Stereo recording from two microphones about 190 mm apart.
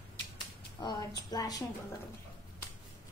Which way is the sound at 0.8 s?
25° left (ahead or behind).